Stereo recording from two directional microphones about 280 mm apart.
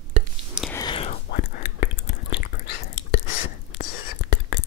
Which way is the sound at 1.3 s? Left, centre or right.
Left.